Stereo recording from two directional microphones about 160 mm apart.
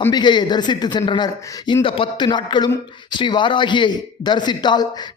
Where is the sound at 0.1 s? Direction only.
30° left (ahead or behind).